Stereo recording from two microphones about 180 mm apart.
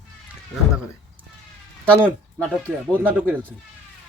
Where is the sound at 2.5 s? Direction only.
5° left (ahead or behind).